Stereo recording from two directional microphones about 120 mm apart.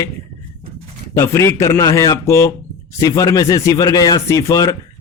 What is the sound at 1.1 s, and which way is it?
Speech, 25° left (ahead or behind).